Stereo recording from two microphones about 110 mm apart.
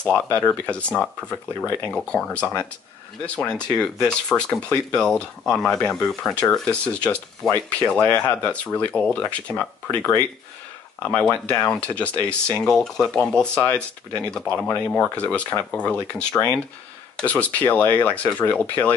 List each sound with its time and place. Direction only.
0.0 s speech: 10° left (ahead or behind)
1.9 s speech: 10° left (ahead or behind)
16.3 s speech: 20° left (ahead or behind)